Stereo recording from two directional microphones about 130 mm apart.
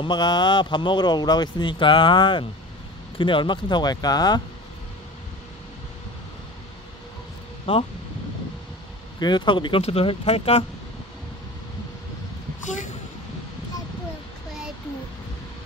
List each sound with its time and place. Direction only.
0.0 s speech: 35° left (ahead or behind)
7.7 s speech: 45° left (ahead or behind)
9.2 s speech: 35° left (ahead or behind); by 10.6 s 50° left (ahead or behind)